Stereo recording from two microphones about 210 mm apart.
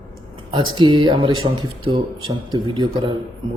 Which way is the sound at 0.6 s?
20° right (ahead or behind).